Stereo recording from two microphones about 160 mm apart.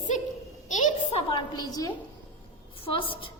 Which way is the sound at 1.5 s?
25° left (ahead or behind).